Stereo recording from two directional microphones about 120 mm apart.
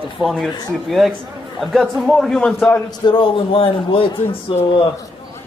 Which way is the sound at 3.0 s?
45° left (ahead or behind).